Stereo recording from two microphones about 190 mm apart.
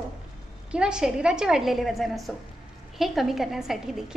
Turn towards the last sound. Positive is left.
turn(degrees=0)  # may be behind; listen again after turning